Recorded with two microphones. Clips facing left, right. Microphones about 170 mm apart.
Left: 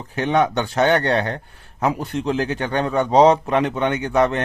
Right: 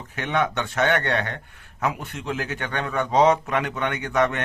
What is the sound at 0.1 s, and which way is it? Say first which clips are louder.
Speech: left 6 dB; 30° left (ahead or behind).